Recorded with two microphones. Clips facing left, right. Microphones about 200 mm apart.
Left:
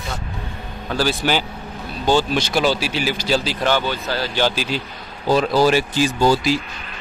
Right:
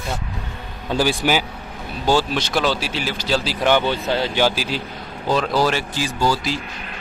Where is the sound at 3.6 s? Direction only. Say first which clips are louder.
Right 2 dB; 15° right (ahead or behind).